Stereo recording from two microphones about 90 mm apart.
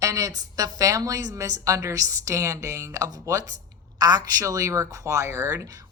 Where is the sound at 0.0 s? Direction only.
40° right (ahead or behind).